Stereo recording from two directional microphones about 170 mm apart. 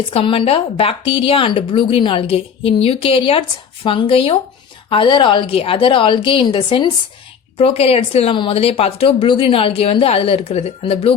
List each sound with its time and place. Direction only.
0.1 s speech: 30° left (ahead or behind)